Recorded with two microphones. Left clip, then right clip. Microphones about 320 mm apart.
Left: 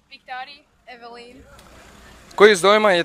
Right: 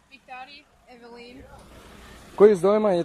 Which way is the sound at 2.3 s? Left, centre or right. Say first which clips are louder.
Left 4 dB; left.